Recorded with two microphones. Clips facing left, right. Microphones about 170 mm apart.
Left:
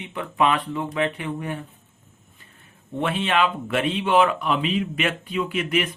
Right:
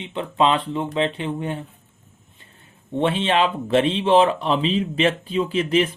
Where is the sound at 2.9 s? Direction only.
30° right (ahead or behind).